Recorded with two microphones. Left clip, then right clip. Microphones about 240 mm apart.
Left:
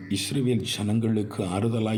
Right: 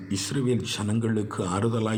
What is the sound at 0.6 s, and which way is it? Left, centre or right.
Speech, centre.